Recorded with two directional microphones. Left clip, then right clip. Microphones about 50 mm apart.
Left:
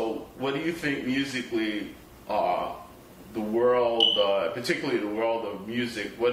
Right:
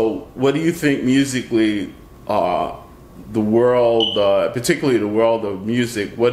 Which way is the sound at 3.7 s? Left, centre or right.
Right.